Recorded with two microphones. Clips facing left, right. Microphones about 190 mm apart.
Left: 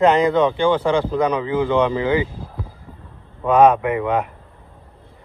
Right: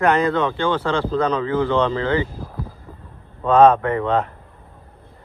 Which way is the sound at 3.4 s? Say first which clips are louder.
Even; 10° left (ahead or behind).